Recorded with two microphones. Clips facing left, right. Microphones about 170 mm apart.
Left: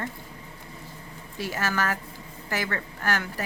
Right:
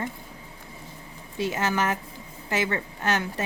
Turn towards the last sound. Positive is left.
turn(degrees=-20)  # may be behind; listen again after turning